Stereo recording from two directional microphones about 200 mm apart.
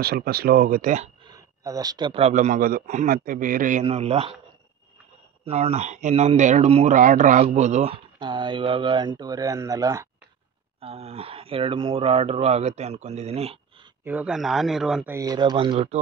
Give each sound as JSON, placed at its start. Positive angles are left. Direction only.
{"t": 0.0, "sound": "speech", "side_deg": -50}
{"t": 1.2, "sound": "speech", "side_deg": -20}
{"t": 3.8, "sound": "speech", "side_deg": -30}
{"t": 5.4, "sound": "speech", "side_deg": -30}
{"t": 10.8, "sound": "speech", "side_deg": -30}
{"t": 14.0, "sound": "speech", "side_deg": -5}
{"t": 15.1, "sound": "speech", "side_deg": -20}